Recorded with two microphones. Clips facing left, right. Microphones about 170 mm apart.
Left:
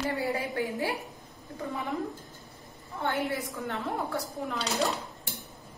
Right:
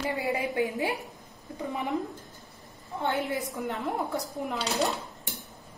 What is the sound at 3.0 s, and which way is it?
A woman's voice, 20° right (ahead or behind).